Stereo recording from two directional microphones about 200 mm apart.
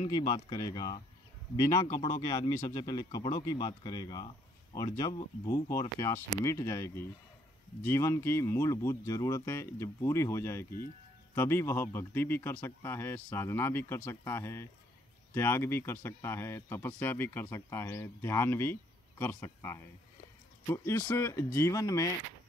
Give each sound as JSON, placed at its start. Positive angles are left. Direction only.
{"t": 0.0, "sound": "speech", "side_deg": 25}